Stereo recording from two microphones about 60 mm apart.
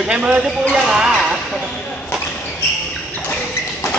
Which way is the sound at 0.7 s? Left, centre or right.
Centre.